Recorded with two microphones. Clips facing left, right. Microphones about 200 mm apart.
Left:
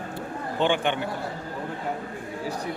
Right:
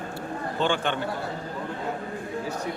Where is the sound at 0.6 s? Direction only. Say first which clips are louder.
Left 2 dB; 15° left (ahead or behind).